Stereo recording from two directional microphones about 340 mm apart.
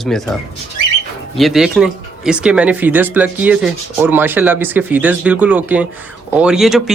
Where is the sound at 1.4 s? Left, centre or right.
Centre.